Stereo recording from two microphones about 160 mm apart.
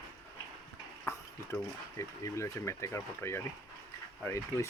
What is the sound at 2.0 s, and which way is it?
Speech, 20° left (ahead or behind).